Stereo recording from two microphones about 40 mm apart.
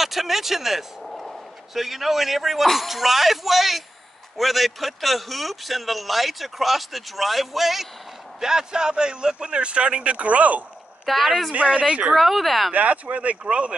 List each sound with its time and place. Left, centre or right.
0.0 s a man's voice: centre; by 10.1 s right
10.1 s speech: right
11.1 s speech: centre
11.5 s speech: right
11.8 s a man's voice: right
12.2 s speech: centre
12.7 s speech: right